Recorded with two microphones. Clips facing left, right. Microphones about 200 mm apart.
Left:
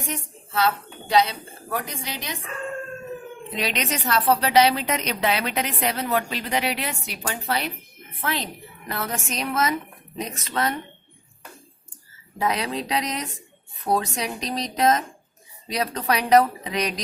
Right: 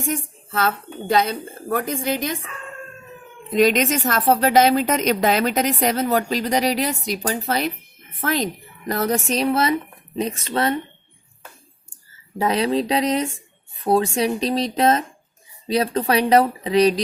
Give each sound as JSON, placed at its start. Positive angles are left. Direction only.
{"t": 0.0, "sound": "a woman's voice", "side_deg": -50}
{"t": 3.5, "sound": "a woman's voice", "side_deg": -45}
{"t": 12.4, "sound": "speech", "side_deg": -30}